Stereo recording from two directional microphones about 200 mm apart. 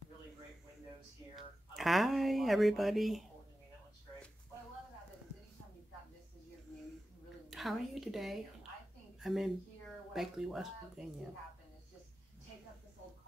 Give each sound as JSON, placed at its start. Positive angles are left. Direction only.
{"t": 1.8, "sound": "speech", "side_deg": 0}
{"t": 7.4, "sound": "a woman's voice", "side_deg": 0}